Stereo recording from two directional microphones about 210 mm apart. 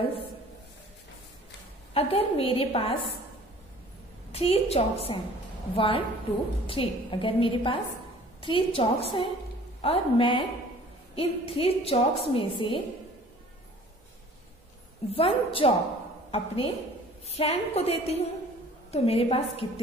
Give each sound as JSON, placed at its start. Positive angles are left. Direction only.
{"t": 2.0, "sound": "a woman's voice", "side_deg": 25}
{"t": 4.3, "sound": "a woman's voice", "side_deg": 30}
{"t": 15.0, "sound": "a woman's voice", "side_deg": 25}